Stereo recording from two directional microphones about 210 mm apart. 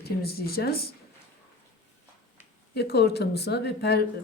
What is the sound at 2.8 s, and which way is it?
Speech, 50° left (ahead or behind).